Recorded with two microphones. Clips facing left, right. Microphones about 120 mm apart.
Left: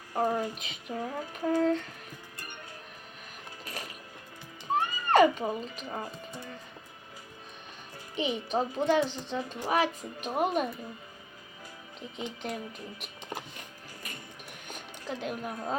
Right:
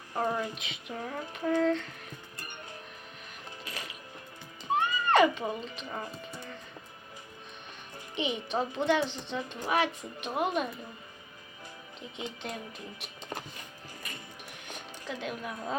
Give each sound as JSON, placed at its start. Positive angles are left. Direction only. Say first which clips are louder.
{"t": 0.1, "sound": "speech", "louder": "left 2 dB", "side_deg": 35}
{"t": 3.6, "sound": "music", "louder": "left 2 dB", "side_deg": 45}
{"t": 4.8, "sound": "a child's voice", "louder": "left 2 dB", "side_deg": 35}
{"t": 8.1, "sound": "speech", "louder": "left 2 dB", "side_deg": 35}
{"t": 15.0, "sound": "a woman's voice", "louder": "left 2 dB", "side_deg": 40}